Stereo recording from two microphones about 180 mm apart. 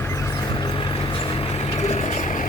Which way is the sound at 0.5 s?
30° left (ahead or behind).